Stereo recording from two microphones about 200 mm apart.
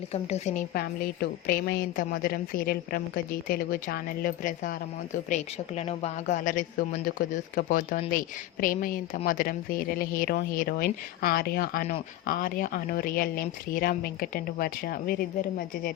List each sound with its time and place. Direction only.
0.1 s speech: 35° left (ahead or behind)